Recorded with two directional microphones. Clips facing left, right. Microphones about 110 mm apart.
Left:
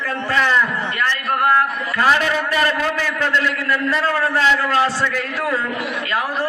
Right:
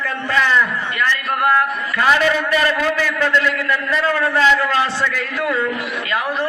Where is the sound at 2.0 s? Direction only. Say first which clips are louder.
Right 1 dB; 35° left (ahead or behind).